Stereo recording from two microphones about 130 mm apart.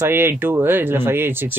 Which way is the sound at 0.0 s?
20° right (ahead or behind).